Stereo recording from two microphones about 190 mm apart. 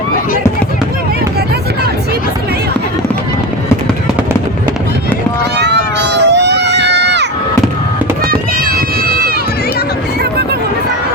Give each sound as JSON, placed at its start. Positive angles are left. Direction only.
{"t": 5.5, "sound": "run", "side_deg": -65}
{"t": 8.3, "sound": "run", "side_deg": -50}